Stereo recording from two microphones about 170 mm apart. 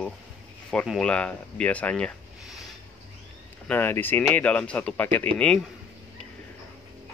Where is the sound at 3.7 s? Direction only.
10° left (ahead or behind).